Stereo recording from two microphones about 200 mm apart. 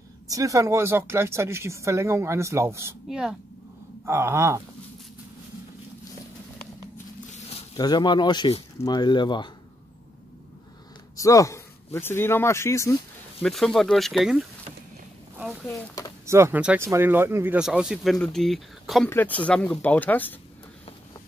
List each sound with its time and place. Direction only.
0.3 s speech: 15° right (ahead or behind)
7.7 s speech: 20° left (ahead or behind)
11.1 s a man's voice: 15° left (ahead or behind)
13.4 s speech: centre (ahead or behind)
15.6 s speech: 15° left (ahead or behind)
16.3 s speech: 15° right (ahead or behind); by 20.3 s 10° left (ahead or behind)